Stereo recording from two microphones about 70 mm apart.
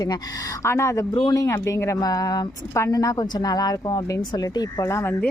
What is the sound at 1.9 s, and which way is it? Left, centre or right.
Speech, left.